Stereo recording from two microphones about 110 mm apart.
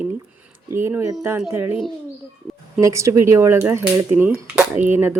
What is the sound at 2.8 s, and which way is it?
Speech, 30° right (ahead or behind).